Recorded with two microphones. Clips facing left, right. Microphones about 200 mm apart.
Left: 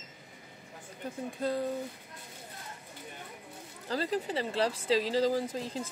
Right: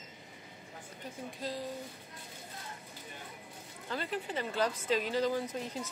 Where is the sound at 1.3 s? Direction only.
55° left (ahead or behind).